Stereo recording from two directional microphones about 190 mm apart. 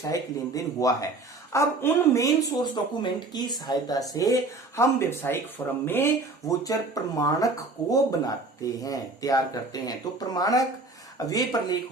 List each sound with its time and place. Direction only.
0.0 s speech: 20° left (ahead or behind)